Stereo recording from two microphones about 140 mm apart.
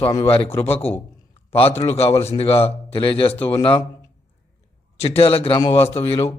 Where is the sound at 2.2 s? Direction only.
45° left (ahead or behind).